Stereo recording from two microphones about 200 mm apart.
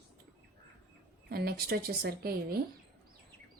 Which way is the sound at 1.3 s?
50° right (ahead or behind).